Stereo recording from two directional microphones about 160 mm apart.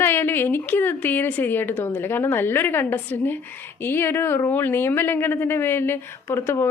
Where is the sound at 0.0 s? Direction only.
15° left (ahead or behind).